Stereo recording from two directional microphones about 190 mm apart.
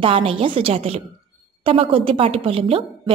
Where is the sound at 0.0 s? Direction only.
30° right (ahead or behind).